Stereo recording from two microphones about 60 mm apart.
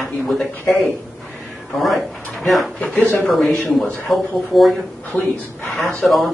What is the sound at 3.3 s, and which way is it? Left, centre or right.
Speech, centre.